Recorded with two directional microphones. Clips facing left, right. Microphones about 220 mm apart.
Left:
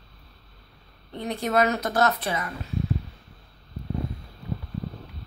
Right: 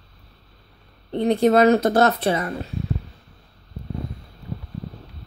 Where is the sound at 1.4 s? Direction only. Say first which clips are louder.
Right 8 dB; 30° right (ahead or behind).